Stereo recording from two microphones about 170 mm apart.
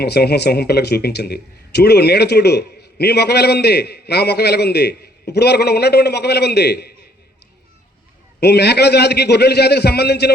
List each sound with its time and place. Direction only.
0.0 s a man's voice: 75° left (ahead or behind)
8.4 s a man's voice: 75° left (ahead or behind)